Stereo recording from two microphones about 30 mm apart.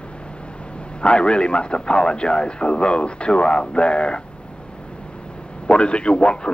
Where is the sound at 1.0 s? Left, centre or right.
Left.